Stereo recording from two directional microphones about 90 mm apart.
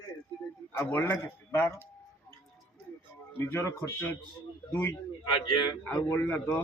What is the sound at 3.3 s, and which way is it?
A man's voice, 30° left (ahead or behind).